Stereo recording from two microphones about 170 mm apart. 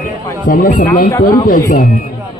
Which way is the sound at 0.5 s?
55° left (ahead or behind).